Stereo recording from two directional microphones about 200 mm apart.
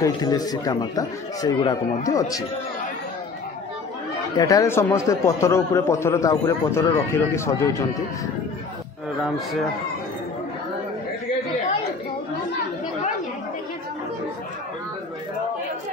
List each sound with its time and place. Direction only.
0.0 s speech: 20° left (ahead or behind)
4.4 s a man's voice: 15° left (ahead or behind)